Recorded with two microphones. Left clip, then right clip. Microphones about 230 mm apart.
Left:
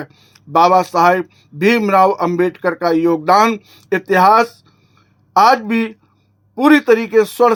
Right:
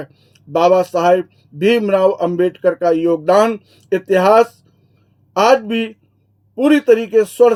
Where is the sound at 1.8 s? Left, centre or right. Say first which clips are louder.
Left 2 dB; centre.